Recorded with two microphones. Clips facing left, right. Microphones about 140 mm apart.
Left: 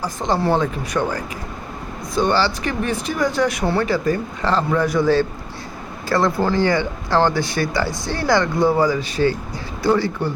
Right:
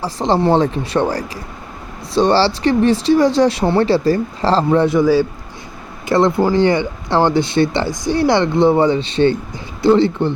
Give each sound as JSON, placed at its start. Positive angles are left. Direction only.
{"t": 0.0, "sound": "speech", "side_deg": -30}
{"t": 4.9, "sound": "a man's voice", "side_deg": -10}
{"t": 6.1, "sound": "speech", "side_deg": -20}